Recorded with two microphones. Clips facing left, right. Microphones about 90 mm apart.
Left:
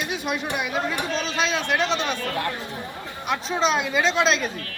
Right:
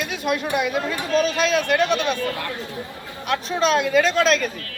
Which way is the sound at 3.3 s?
15° left (ahead or behind).